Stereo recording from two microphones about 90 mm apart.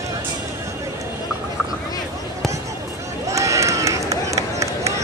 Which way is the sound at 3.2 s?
35° right (ahead or behind).